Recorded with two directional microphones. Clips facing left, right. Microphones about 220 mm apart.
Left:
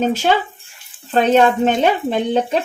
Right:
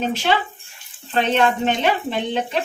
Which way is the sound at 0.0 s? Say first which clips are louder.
Left 4 dB; 45° left (ahead or behind).